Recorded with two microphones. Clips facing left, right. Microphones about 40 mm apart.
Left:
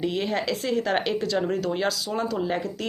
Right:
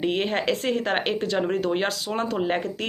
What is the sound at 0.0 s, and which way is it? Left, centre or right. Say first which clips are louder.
Speech: right 2 dB; right.